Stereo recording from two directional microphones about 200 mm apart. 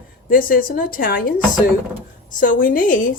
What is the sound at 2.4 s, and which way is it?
Speech, 40° left (ahead or behind).